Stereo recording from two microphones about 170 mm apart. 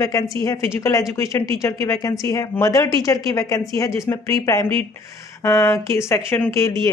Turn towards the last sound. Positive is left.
turn(degrees=20)  # may be behind; listen again after turning